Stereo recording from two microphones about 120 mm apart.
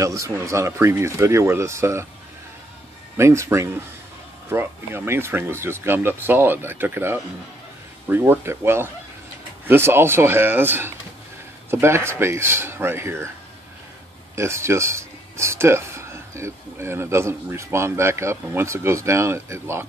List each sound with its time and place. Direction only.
0.0 s speech: 25° right (ahead or behind)
3.2 s speech: 25° right (ahead or behind)
14.3 s speech: 20° right (ahead or behind)